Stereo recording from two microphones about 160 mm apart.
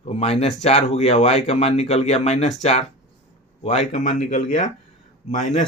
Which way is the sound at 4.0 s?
55° left (ahead or behind).